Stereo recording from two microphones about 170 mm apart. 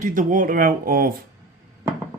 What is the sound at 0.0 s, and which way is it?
Speech, 50° right (ahead or behind).